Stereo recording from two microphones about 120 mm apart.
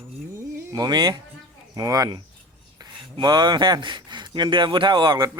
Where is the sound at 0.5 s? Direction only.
30° right (ahead or behind).